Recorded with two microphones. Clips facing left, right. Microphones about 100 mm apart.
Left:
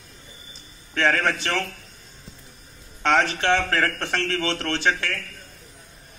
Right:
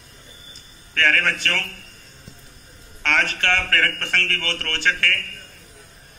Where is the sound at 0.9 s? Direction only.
20° left (ahead or behind).